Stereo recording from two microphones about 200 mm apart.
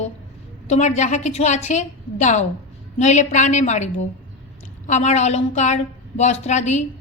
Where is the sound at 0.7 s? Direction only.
35° left (ahead or behind).